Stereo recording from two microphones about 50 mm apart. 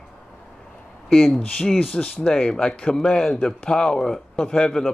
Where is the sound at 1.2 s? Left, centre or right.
Centre.